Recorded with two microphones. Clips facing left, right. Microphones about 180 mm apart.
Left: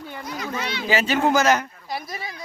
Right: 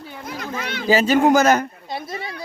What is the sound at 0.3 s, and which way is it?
Speech, 50° right (ahead or behind).